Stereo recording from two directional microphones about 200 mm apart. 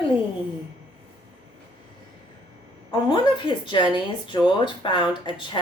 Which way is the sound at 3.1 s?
25° left (ahead or behind).